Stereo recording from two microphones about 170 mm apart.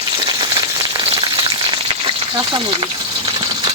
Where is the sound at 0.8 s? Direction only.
25° right (ahead or behind).